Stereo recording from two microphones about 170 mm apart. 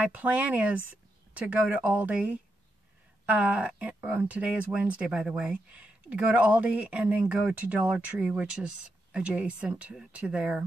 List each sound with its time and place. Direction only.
0.0 s speech: 10° right (ahead or behind)